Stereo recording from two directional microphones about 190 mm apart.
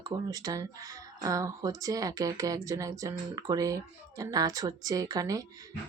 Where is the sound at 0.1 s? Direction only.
20° right (ahead or behind).